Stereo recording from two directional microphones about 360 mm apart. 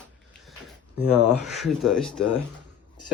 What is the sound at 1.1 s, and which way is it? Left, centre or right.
Speech, centre.